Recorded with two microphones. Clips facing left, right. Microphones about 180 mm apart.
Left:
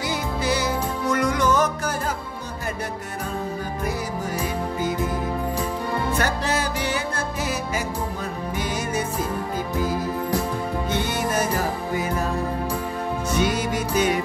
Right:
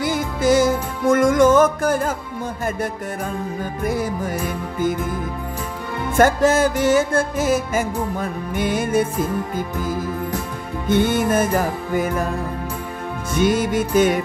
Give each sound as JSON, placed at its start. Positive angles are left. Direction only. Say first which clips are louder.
{"t": 0.0, "sound": "music", "louder": "right 6 dB", "side_deg": -50}
{"t": 6.1, "sound": "music", "louder": "right 14 dB", "side_deg": -45}
{"t": 10.9, "sound": "music", "louder": "right 11 dB", "side_deg": -50}
{"t": 13.3, "sound": "music", "louder": "right 6 dB", "side_deg": -50}